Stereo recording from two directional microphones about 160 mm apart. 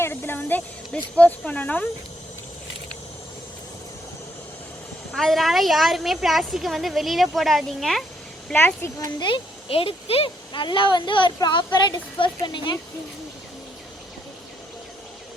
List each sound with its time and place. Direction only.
0.0 s music: 15° left (ahead or behind)
1.1 s speech: 10° left (ahead or behind)
5.1 s a woman's voice: centre (ahead or behind)
8.4 s speech: 15° left (ahead or behind); by 12.8 s 30° left (ahead or behind)